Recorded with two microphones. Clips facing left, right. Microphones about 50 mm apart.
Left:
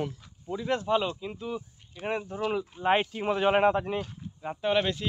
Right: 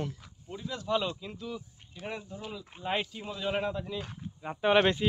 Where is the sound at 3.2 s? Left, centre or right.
Left.